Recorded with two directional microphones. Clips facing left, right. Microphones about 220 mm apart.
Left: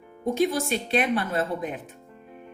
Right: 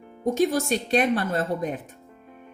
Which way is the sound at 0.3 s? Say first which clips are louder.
Right 2 dB; 45° right (ahead or behind).